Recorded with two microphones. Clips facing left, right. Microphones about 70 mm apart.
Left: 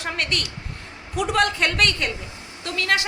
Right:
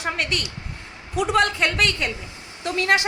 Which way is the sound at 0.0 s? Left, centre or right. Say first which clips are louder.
Right 1 dB; centre.